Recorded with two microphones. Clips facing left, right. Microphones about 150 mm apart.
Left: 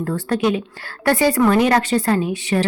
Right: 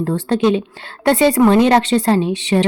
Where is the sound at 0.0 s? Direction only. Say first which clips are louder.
Right 4 dB; 25° right (ahead or behind).